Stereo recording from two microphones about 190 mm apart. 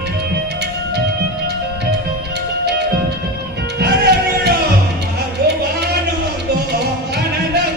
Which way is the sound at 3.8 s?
60° right (ahead or behind).